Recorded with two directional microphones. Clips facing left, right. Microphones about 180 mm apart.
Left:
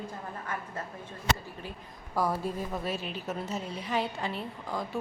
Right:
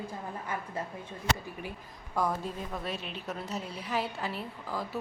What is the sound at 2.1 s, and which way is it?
A woman's voice, 5° left (ahead or behind).